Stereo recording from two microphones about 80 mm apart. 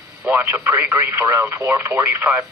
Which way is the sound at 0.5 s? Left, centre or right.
Right.